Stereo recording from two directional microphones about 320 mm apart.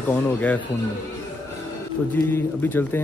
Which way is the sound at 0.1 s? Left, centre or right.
Centre.